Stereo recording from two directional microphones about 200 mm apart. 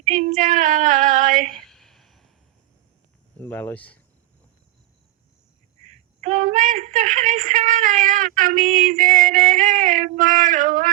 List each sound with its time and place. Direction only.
0.0 s female singing: 40° right (ahead or behind)
1.5 s a sound: centre (ahead or behind)
3.4 s speech: 5° left (ahead or behind)
6.2 s speech: 40° right (ahead or behind)